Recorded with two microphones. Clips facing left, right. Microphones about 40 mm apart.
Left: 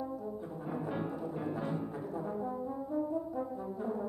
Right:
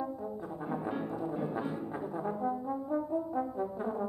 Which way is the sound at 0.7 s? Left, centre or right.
Centre.